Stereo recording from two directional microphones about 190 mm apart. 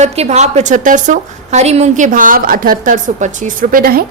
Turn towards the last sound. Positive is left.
turn(degrees=-50)  # may be behind; listen again after turning